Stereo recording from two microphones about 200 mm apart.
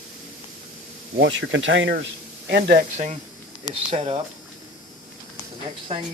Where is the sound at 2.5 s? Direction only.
50° right (ahead or behind).